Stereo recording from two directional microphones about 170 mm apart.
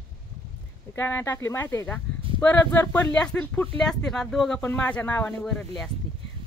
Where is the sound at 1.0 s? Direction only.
10° left (ahead or behind).